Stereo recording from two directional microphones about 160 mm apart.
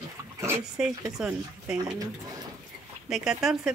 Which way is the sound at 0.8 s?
5° right (ahead or behind).